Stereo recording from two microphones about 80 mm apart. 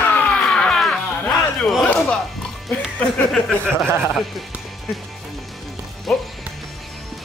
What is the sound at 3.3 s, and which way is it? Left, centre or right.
Speech, centre.